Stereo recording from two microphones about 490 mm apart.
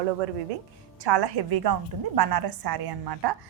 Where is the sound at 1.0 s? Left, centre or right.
Right.